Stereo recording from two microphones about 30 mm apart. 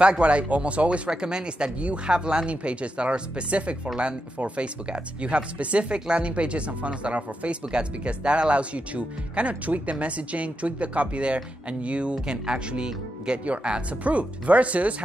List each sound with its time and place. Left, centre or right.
0.2 s speech: right
1.1 s speech: right
14.0 s speech: right